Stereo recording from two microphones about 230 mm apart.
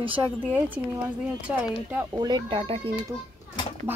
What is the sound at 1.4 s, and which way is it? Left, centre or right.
Speech, centre.